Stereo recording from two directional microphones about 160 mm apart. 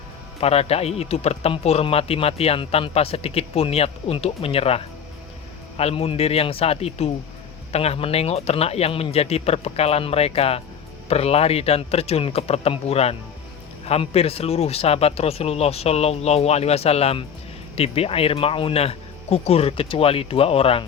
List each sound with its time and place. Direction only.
0.3 s speech: 40° left (ahead or behind)